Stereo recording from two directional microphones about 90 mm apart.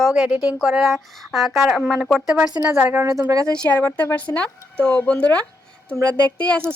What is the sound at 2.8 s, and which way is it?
Speech, 20° right (ahead or behind).